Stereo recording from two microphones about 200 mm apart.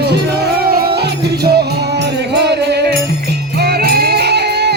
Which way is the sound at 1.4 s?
55° right (ahead or behind).